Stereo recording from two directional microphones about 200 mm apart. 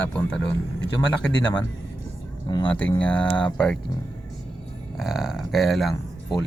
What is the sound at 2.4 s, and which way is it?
Speech, 20° left (ahead or behind).